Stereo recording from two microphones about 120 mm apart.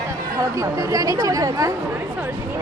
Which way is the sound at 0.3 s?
25° right (ahead or behind).